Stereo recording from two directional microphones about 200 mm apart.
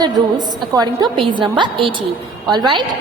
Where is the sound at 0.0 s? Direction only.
20° right (ahead or behind).